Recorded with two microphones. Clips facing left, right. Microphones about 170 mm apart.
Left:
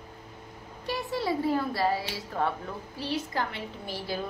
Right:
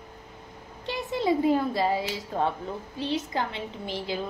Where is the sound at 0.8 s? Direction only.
20° right (ahead or behind).